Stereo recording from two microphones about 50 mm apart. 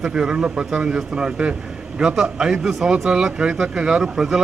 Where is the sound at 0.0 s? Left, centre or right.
Centre.